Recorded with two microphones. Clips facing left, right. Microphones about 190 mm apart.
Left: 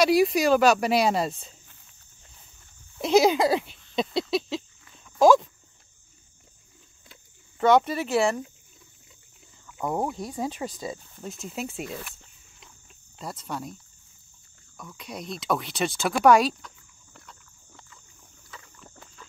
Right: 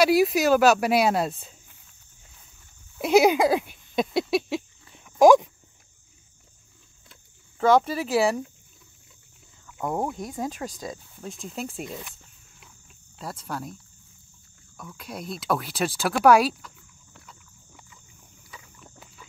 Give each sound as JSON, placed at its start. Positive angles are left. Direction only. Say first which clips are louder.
{"t": 0.0, "sound": "speech", "louder": "right 1 dB", "side_deg": -5}
{"t": 3.0, "sound": "speech", "louder": "right 1 dB", "side_deg": -10}
{"t": 4.8, "sound": "cricket", "louder": "right 2 dB", "side_deg": -20}
{"t": 7.1, "sound": "cricket", "louder": "left 2 dB", "side_deg": 0}
{"t": 9.7, "sound": "speech", "louder": "even", "side_deg": 0}
{"t": 13.2, "sound": "speech", "louder": "even", "side_deg": 0}
{"t": 14.8, "sound": "speech", "louder": "right 1 dB", "side_deg": -5}
{"t": 18.5, "sound": "boat", "louder": "even", "side_deg": -10}